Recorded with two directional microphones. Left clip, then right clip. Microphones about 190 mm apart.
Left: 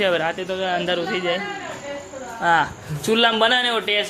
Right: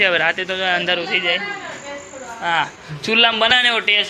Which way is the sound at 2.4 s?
30° left (ahead or behind).